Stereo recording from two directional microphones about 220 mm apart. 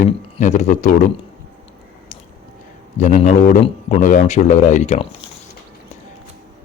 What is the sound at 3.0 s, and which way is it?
Speech, 35° left (ahead or behind).